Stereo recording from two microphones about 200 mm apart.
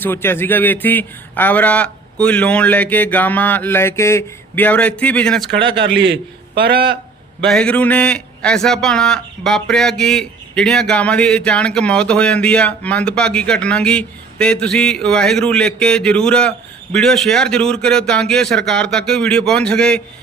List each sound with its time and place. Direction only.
0.0 s a man's voice: 10° left (ahead or behind)
5.7 s a man's voice: 65° right (ahead or behind)
7.4 s a man's voice: 5° left (ahead or behind)